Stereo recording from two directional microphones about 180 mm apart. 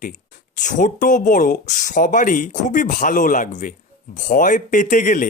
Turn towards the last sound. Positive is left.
turn(degrees=45)  # may be behind; listen again after turning